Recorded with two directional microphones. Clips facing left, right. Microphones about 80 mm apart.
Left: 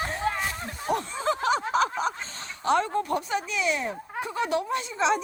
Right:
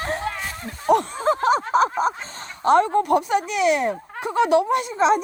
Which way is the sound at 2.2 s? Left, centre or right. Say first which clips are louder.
Right 7 dB; right.